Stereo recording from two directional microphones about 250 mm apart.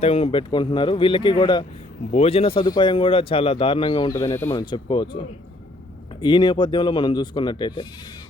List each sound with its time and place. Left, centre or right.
0.0 s speech: left
6.2 s speech: centre